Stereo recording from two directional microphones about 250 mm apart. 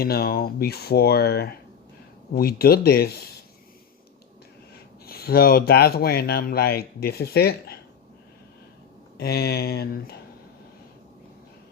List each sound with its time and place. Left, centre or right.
0.0 s speech: left
5.0 s speech: left
9.1 s speech: left